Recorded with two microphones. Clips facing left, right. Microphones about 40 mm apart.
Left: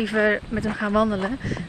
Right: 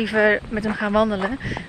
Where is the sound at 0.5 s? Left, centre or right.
Right.